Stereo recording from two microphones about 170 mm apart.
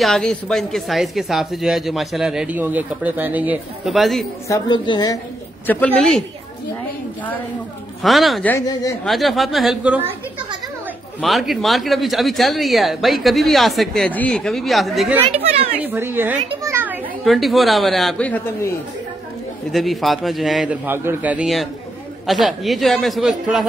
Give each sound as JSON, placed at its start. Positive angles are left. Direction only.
{"t": 0.0, "sound": "speech", "side_deg": 5}
{"t": 4.5, "sound": "a woman's voice", "side_deg": 25}
{"t": 5.9, "sound": "speech", "side_deg": 0}
{"t": 8.0, "sound": "speech", "side_deg": 0}
{"t": 8.5, "sound": "a woman's voice", "side_deg": 20}
{"t": 9.0, "sound": "speech", "side_deg": 0}
{"t": 11.1, "sound": "speech", "side_deg": 0}
{"t": 15.3, "sound": "a child's voice", "side_deg": -35}
{"t": 15.8, "sound": "a man's voice", "side_deg": -10}
{"t": 16.6, "sound": "children playing", "side_deg": -10}
{"t": 17.2, "sound": "speech", "side_deg": 0}
{"t": 19.7, "sound": "speech", "side_deg": 0}
{"t": 20.8, "sound": "a man's voice", "side_deg": -15}